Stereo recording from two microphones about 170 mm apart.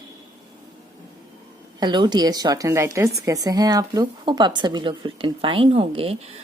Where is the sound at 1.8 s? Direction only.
25° right (ahead or behind).